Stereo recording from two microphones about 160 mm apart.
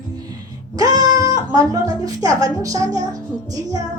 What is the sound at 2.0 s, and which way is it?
A woman's voice, 20° right (ahead or behind).